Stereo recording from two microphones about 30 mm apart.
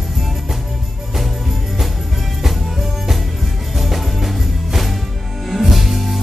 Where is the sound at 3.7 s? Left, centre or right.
Centre.